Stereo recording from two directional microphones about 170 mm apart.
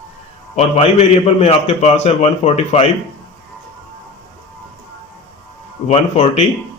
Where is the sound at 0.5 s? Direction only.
40° left (ahead or behind).